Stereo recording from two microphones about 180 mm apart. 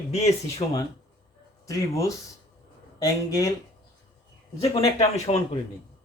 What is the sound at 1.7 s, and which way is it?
Speech, 20° left (ahead or behind).